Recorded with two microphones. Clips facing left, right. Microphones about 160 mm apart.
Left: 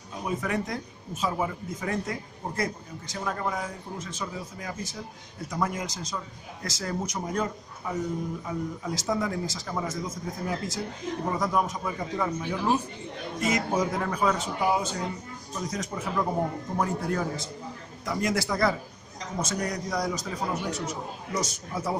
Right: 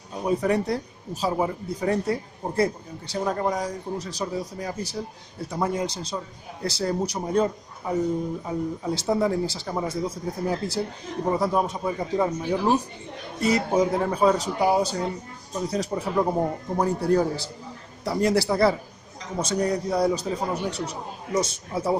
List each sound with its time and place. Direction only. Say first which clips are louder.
0.3 s speech: right 7 dB; 35° right (ahead or behind)